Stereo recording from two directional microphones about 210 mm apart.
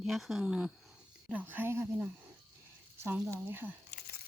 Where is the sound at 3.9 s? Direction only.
45° left (ahead or behind).